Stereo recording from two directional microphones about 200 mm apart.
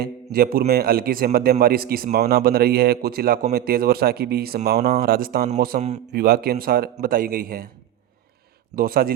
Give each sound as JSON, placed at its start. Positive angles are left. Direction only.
{"t": 0.3, "sound": "a man's voice", "side_deg": -50}
{"t": 8.7, "sound": "a man's voice", "side_deg": -50}